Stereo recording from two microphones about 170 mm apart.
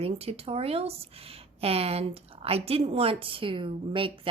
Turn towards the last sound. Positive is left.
turn(degrees=-30)  # may be behind; listen again after turning